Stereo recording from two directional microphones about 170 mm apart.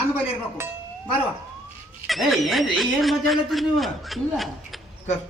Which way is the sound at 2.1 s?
Centre (ahead or behind).